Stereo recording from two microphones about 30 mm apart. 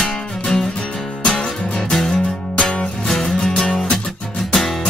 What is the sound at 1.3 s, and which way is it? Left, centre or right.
Music, left.